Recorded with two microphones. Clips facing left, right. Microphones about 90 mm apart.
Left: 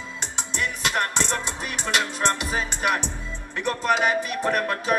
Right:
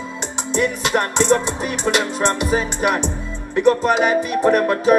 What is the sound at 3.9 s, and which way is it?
Music, 15° right (ahead or behind).